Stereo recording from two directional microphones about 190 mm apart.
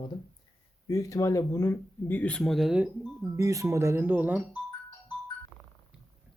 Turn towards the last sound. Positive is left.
turn(degrees=-15)  # may be behind; listen again after turning